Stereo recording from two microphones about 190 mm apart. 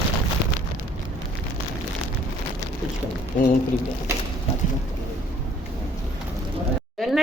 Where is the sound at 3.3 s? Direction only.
40° left (ahead or behind).